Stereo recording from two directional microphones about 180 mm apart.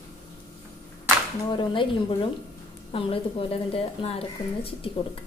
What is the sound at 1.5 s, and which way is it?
A woman's voice, 25° left (ahead or behind).